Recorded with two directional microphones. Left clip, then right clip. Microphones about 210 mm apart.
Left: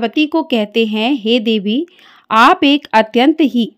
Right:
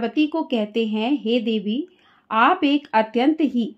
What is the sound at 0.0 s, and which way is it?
Speech, 40° left (ahead or behind).